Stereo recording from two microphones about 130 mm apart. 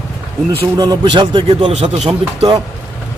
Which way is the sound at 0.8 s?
35° right (ahead or behind).